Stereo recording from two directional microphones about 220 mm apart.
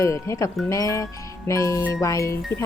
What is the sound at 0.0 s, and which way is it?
Speech, 15° left (ahead or behind).